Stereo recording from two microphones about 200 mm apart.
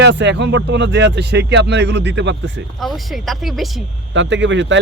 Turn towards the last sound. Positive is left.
turn(degrees=-65)  # may be behind; listen again after turning